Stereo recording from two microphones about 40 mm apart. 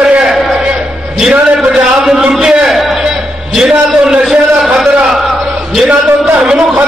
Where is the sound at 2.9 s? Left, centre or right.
Centre.